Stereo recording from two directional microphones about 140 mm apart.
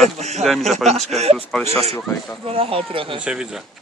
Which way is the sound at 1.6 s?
20° left (ahead or behind).